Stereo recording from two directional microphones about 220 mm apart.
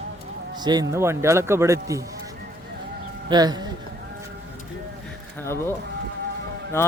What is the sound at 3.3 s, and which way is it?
Speech, 20° right (ahead or behind).